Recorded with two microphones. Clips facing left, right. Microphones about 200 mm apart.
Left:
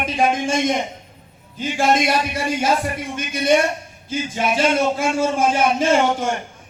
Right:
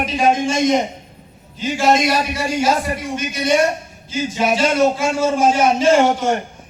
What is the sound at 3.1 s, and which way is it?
A man's voice, 55° left (ahead or behind).